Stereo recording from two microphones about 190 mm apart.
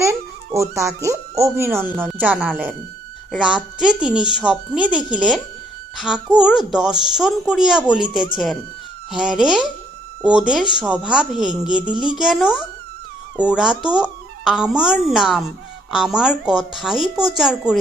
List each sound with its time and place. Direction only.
0.0 s a woman's voice: 15° right (ahead or behind)
9.1 s speech: 5° right (ahead or behind)